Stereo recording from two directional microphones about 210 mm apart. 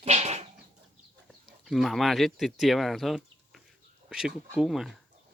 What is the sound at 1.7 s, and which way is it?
Speech, centre (ahead or behind).